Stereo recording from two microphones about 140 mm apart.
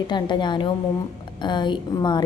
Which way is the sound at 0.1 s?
35° left (ahead or behind).